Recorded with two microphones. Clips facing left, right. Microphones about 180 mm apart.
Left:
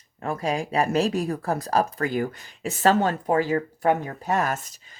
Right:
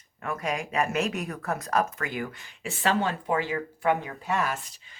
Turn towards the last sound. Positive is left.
turn(degrees=40)  # may be behind; listen again after turning